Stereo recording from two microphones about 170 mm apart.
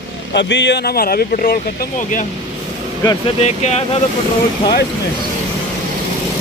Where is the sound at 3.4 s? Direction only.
40° left (ahead or behind).